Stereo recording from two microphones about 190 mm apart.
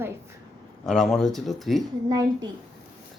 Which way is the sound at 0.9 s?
Centre (ahead or behind).